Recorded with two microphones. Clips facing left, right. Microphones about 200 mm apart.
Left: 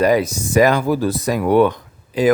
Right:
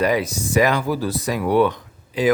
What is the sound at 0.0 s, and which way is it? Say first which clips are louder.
Speech: left 4 dB; 45° left (ahead or behind).